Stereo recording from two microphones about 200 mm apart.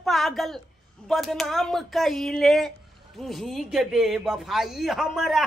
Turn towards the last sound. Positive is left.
turn(degrees=0)  # may be behind; listen again after turning